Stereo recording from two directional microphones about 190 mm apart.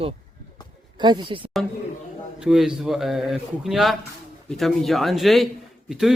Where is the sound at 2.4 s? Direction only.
5° right (ahead or behind).